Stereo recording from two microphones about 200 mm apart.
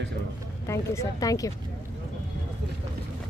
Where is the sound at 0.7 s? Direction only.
15° left (ahead or behind).